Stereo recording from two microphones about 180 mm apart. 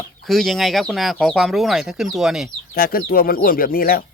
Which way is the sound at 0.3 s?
Centre (ahead or behind).